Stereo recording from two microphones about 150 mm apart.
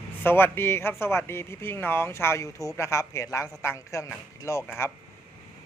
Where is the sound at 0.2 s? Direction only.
15° left (ahead or behind).